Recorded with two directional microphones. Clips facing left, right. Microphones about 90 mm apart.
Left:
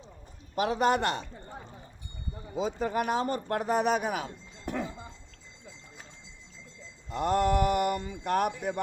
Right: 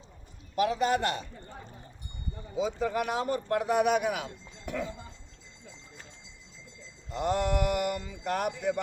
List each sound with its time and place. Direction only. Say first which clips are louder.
0.6 s speech: left 1 dB; 45° left (ahead or behind)
2.6 s speech: even; 45° left (ahead or behind)
7.1 s speech: left 3 dB; 45° left (ahead or behind)